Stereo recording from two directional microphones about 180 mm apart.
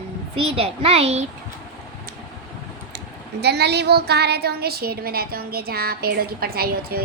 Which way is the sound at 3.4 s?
65° right (ahead or behind).